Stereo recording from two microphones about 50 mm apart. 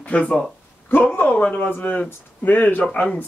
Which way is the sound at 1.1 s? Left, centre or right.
Left.